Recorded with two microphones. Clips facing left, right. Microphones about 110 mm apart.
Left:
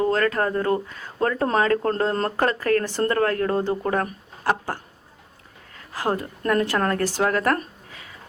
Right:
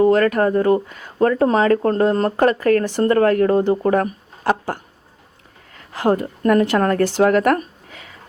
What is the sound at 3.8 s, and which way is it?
Speech, 30° right (ahead or behind).